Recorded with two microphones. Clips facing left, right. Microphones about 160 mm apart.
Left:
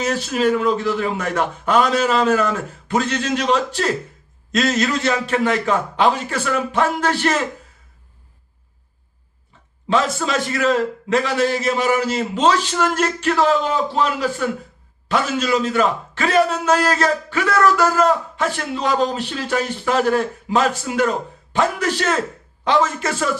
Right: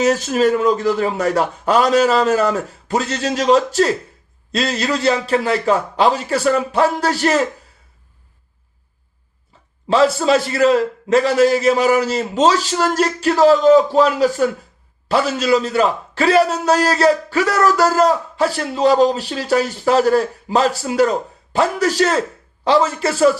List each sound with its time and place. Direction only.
0.0 s a man's voice: 45° right (ahead or behind)
9.9 s a man's voice: 35° right (ahead or behind)